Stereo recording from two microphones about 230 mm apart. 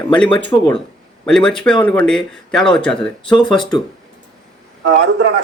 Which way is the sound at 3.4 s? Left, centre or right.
Centre.